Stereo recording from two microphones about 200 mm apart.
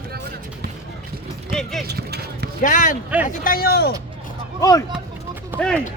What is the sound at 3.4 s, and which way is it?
Speech, 50° left (ahead or behind).